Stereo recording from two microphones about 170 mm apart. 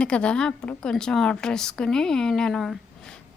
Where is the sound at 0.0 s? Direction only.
5° left (ahead or behind).